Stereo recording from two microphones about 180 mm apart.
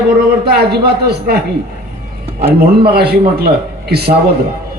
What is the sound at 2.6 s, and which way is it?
A man's voice, 60° right (ahead or behind).